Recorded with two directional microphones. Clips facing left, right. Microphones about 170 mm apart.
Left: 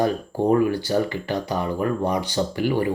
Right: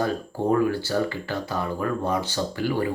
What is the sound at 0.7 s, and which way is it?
Speech, 15° left (ahead or behind).